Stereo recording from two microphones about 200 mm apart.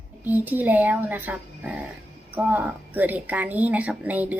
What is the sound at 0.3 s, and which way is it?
Speech, 10° right (ahead or behind).